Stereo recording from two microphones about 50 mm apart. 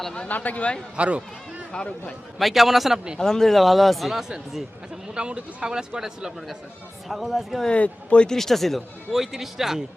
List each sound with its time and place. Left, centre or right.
0.3 s speech: left
0.9 s speech: right
1.7 s speech: centre
2.4 s speech: centre
3.2 s speech: centre
5.1 s speech: centre
7.1 s speech: centre
7.7 s speech: left
8.4 s speech: centre
9.1 s speech: centre